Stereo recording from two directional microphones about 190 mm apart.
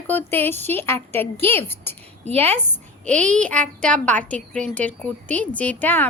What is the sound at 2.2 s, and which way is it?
Speech, 35° right (ahead or behind).